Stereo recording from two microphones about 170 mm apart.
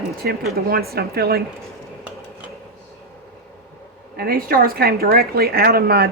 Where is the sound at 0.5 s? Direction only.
65° right (ahead or behind).